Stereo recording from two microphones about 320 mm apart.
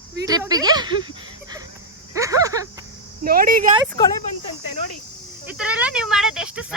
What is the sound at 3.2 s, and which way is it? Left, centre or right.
Speech, right.